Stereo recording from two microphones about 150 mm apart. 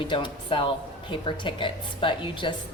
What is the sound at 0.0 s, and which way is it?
A woman's voice, 35° left (ahead or behind).